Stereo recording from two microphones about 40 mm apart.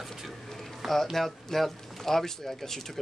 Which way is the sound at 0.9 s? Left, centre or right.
Centre.